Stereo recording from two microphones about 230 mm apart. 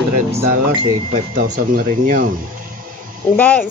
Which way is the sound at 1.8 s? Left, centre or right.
Right.